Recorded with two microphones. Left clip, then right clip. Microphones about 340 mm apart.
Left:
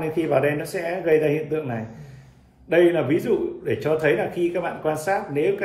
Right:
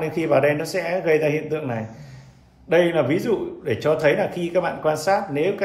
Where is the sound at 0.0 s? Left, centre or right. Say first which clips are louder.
Right 2 dB; centre.